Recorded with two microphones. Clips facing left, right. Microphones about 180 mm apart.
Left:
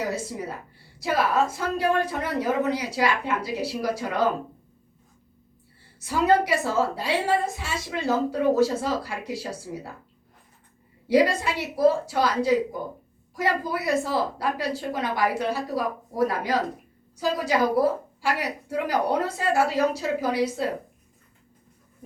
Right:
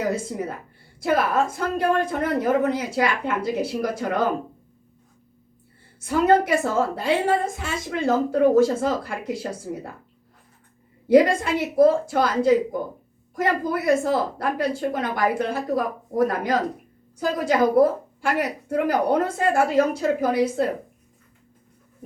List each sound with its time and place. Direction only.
0.1 s a woman's voice: 50° right (ahead or behind)
6.0 s a woman's voice: 55° right (ahead or behind)
11.1 s a woman's voice: 50° right (ahead or behind)